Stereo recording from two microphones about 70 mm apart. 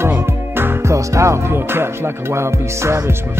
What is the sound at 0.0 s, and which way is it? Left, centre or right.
Music, right.